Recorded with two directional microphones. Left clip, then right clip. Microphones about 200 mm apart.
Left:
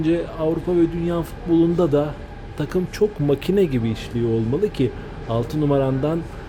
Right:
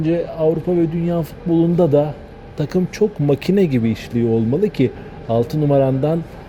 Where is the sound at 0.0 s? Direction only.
15° right (ahead or behind).